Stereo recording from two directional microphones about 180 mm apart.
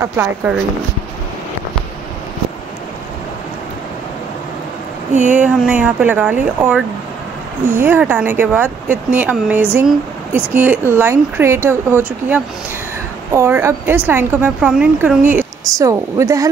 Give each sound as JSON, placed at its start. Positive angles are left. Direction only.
{"t": 0.0, "sound": "speech", "side_deg": -15}
{"t": 5.3, "sound": "speech", "side_deg": -10}